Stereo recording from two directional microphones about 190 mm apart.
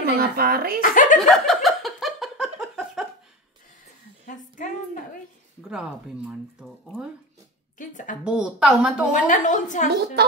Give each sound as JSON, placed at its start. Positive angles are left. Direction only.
{"t": 0.0, "sound": "speech", "side_deg": -55}
{"t": 0.7, "sound": "speech", "side_deg": 45}
{"t": 1.1, "sound": "a sound", "side_deg": 0}
{"t": 5.6, "sound": "speech", "side_deg": -5}
{"t": 7.7, "sound": "a sound", "side_deg": 45}
{"t": 8.2, "sound": "speech", "side_deg": -5}
{"t": 9.1, "sound": "a woman's voice", "side_deg": 40}
{"t": 10.2, "sound": "speech", "side_deg": -55}